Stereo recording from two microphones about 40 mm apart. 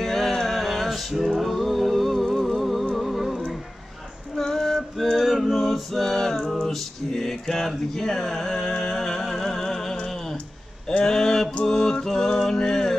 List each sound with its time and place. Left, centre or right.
0.0 s music: centre
3.0 s humming: centre
4.4 s female singing: centre
5.1 s a sound: centre
5.5 s male singing: centre
10.9 s a sound: centre
11.6 s music: centre